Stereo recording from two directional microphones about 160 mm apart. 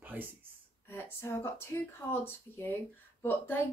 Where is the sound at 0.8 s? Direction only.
15° left (ahead or behind).